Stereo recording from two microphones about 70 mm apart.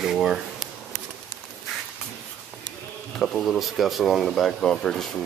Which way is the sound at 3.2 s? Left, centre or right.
Centre.